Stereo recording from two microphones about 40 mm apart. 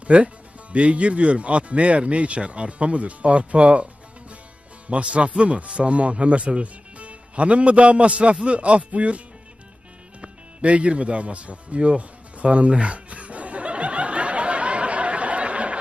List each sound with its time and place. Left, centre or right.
0.1 s speech: right
4.9 s a man's voice: right
10.2 s music: right